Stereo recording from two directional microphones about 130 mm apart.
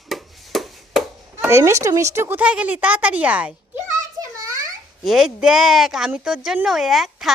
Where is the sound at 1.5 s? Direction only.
20° right (ahead or behind).